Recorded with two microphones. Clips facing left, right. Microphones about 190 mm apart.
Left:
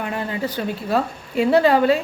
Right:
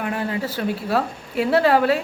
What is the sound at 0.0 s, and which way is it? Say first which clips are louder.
Speech: even; 5° right (ahead or behind).